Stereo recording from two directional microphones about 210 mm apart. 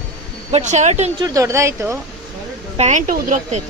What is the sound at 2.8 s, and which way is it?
Speech, 35° right (ahead or behind).